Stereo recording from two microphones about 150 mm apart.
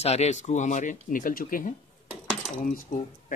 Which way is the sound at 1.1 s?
65° left (ahead or behind).